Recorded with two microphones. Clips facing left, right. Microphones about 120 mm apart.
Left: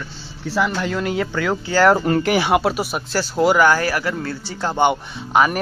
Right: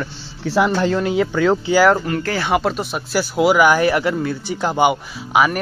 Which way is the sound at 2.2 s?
15° left (ahead or behind).